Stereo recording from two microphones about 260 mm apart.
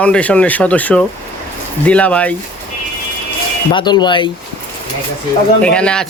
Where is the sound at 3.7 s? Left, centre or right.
Centre.